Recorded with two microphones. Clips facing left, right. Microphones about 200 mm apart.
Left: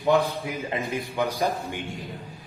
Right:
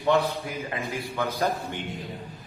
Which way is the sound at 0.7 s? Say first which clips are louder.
Left 3 dB; 20° left (ahead or behind).